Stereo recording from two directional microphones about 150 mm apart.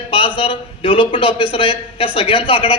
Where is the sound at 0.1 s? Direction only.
35° left (ahead or behind).